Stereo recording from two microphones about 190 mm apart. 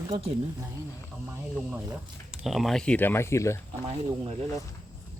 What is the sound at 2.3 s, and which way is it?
Speech, centre (ahead or behind).